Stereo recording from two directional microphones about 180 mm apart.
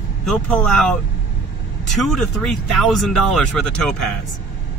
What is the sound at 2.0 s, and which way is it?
Speech, centre (ahead or behind).